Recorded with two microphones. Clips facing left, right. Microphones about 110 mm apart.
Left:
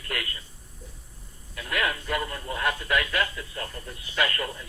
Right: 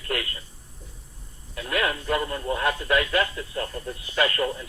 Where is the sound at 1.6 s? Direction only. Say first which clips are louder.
Right 3 dB; 35° right (ahead or behind).